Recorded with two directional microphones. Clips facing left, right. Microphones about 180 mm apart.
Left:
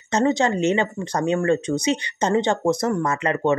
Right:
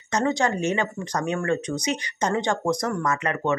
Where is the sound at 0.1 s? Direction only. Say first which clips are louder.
Left 4 dB; 20° left (ahead or behind).